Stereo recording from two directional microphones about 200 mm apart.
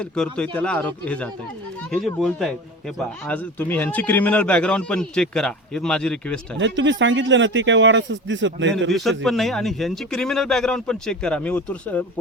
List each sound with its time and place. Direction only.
0.0 s a man's voice: 5° left (ahead or behind)
6.6 s speech: 65° right (ahead or behind)
9.0 s a man's voice: centre (ahead or behind)